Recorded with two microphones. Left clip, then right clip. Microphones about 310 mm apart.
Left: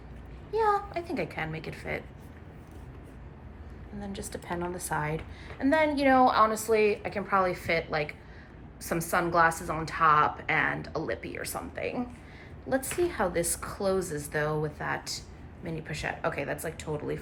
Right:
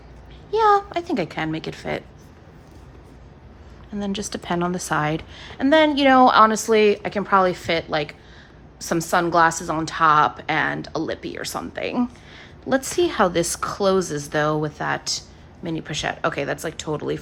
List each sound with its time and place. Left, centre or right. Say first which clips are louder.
0.5 s a woman's voice: right 9 dB; centre
4.3 s a woman's voice: right 9 dB; right